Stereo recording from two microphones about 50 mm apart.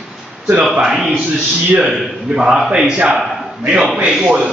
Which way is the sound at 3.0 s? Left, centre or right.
Right.